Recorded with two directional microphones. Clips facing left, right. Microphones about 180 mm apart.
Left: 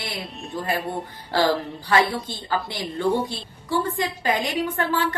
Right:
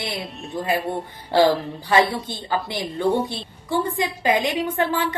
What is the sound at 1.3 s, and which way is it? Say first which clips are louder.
A woman's voice: right 4 dB; 20° right (ahead or behind).